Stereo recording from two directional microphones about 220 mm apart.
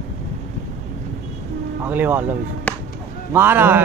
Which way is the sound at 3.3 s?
10° right (ahead or behind).